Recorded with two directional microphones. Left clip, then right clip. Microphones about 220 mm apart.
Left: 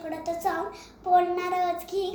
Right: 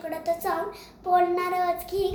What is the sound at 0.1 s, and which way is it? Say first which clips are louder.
A child's voice: right 1 dB; 15° right (ahead or behind).